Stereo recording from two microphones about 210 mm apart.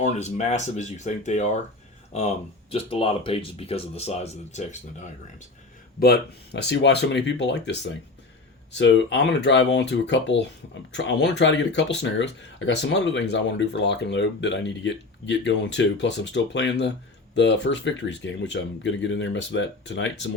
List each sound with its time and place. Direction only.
0.0 s speech: 35° left (ahead or behind)
6.0 s speech: 50° left (ahead or behind)